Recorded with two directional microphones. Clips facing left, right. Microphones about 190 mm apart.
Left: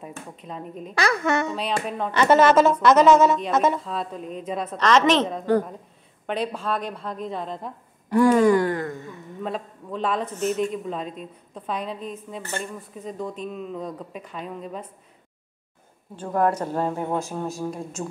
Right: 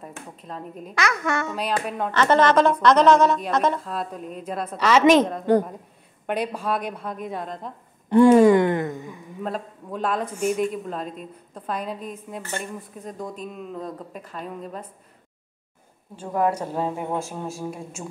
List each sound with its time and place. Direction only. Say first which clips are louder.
0.0 s a woman's voice: left 1 dB; 5° left (ahead or behind)
0.9 s a woman's voice: left 3 dB; 30° left (ahead or behind)
1.5 s a woman's voice: even; 5° right (ahead or behind)
2.1 s a woman's voice: left 2 dB; 10° left (ahead or behind)
3.9 s speech: left 1 dB; 5° right (ahead or behind)
6.2 s speech: right 1 dB; 10° right (ahead or behind)
8.1 s speech: right 3 dB; 25° right (ahead or behind)
9.4 s a woman's voice: even; 5° right (ahead or behind)
16.2 s speech: left 1 dB; 10° right (ahead or behind)